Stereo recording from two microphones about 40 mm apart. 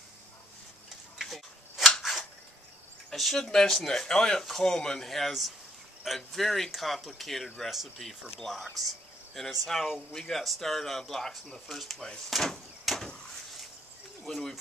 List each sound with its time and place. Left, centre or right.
1.1 s tick-tock: centre
3.1 s speech: centre
12.3 s door: centre
14.2 s speech: centre